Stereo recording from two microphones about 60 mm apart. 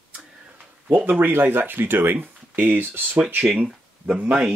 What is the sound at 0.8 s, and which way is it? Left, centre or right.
Speech, right.